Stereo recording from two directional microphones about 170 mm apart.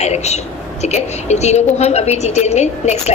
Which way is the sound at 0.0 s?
40° left (ahead or behind).